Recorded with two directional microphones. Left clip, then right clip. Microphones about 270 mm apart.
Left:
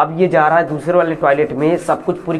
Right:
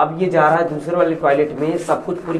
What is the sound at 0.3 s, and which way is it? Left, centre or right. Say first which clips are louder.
A man's voice: even; left.